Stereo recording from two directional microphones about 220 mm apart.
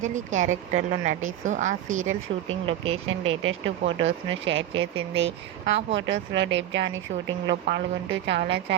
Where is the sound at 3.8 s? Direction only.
55° right (ahead or behind).